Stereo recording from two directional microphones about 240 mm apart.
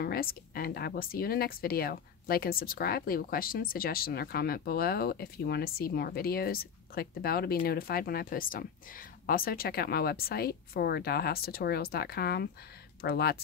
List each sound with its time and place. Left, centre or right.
0.0 s speech: left